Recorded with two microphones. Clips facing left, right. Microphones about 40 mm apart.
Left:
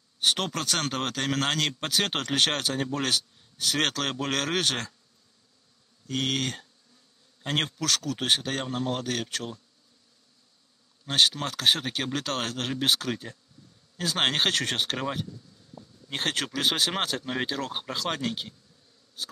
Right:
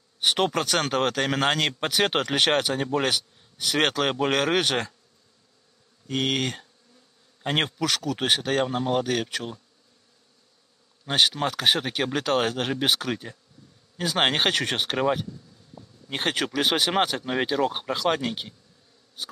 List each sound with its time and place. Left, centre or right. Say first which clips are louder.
0.2 s a man's voice: right 4 dB; centre
6.0 s a man's voice: right 3 dB; centre
11.1 s a man's voice: right 2 dB; centre
15.8 s a sound: even; centre
16.1 s a man's voice: right 3 dB; centre